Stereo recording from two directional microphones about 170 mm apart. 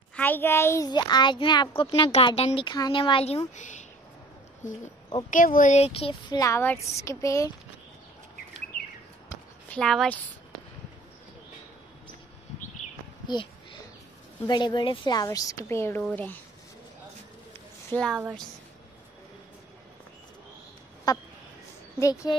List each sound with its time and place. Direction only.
0.1 s a child's voice: 10° left (ahead or behind); by 3.3 s 30° left (ahead or behind)
3.5 s speech: 45° left (ahead or behind)
5.3 s a child's voice: 55° left (ahead or behind); by 6.4 s 35° left (ahead or behind)
6.4 s speech: 15° left (ahead or behind)
9.7 s speech: 5° left (ahead or behind)
14.4 s a child's voice: 25° left (ahead or behind); by 16.3 s 5° left (ahead or behind)
17.9 s speech: 10° left (ahead or behind)
21.1 s a child's voice: 20° left (ahead or behind)